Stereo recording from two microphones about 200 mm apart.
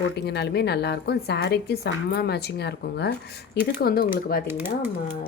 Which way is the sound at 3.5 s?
50° left (ahead or behind).